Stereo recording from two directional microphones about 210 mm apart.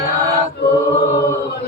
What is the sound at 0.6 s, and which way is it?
Chant, 50° left (ahead or behind).